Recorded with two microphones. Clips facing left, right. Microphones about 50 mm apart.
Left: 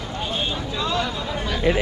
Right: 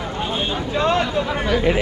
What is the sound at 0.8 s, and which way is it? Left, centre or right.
Speech, right.